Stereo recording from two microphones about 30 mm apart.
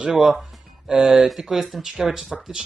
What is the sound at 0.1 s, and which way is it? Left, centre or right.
Speech, centre.